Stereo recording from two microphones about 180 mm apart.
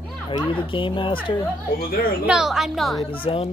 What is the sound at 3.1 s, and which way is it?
Speech, 30° left (ahead or behind).